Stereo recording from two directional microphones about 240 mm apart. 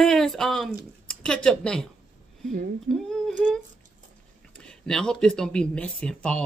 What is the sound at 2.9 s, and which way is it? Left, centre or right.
Speech, centre.